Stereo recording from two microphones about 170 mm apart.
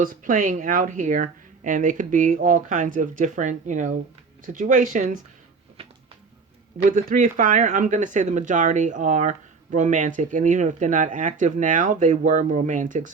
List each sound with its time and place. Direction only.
0.0 s speech: 50° right (ahead or behind)
6.9 s speech: 55° right (ahead or behind)